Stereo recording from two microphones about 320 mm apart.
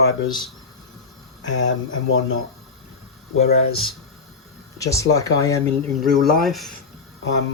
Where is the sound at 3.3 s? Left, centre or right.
Centre.